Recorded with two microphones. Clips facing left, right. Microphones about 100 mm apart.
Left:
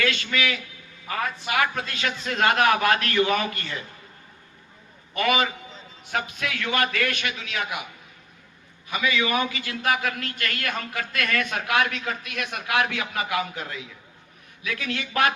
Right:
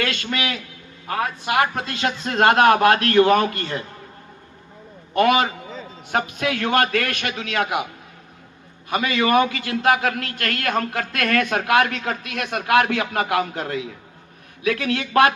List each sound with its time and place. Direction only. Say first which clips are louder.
0.0 s a man's voice: right 1 dB; 45° right (ahead or behind)
1.6 s speech: right 4 dB; 35° right (ahead or behind)
2.4 s a man's voice: right 6 dB; 45° right (ahead or behind)
5.1 s a man's voice: right 6 dB; 45° right (ahead or behind)
8.9 s a man's voice: right 6 dB; 50° right (ahead or behind)
10.6 s a man's voice: right 10 dB; 45° right (ahead or behind)
14.6 s a man's voice: right 8 dB; 50° right (ahead or behind)